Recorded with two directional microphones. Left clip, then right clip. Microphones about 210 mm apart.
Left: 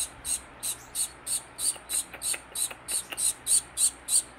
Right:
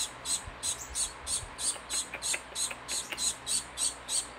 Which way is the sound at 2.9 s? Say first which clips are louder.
Left 1 dB; 20° left (ahead or behind).